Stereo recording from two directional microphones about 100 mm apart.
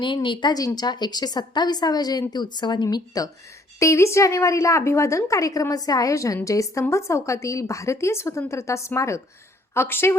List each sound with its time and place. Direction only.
0.0 s a woman's voice: 55° left (ahead or behind)
3.8 s a woman's voice: 30° left (ahead or behind)